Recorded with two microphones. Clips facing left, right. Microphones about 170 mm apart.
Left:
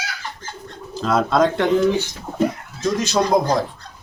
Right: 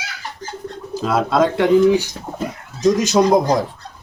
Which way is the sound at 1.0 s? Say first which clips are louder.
Right 1 dB; 5° right (ahead or behind).